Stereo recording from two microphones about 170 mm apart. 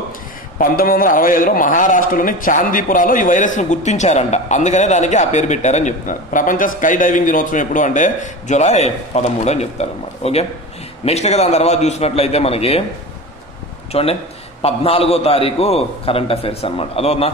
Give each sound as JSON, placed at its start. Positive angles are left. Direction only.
{"t": 0.6, "sound": "a man's voice", "side_deg": 55}
{"t": 13.9, "sound": "a man's voice", "side_deg": 35}